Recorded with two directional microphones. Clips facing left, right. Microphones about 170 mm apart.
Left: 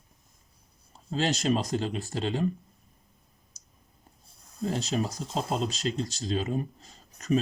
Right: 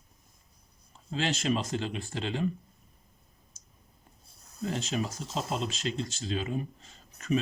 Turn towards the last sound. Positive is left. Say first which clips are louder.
# left 2 dB
turn(degrees=40)  # may be behind; listen again after turning